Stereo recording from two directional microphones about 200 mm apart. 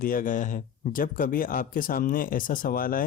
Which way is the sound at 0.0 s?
45° left (ahead or behind).